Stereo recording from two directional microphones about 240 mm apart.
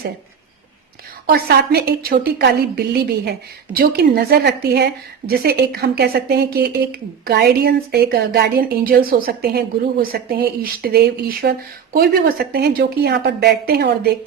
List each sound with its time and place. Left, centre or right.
1.3 s a woman's voice: right
12.5 s a woman's voice: right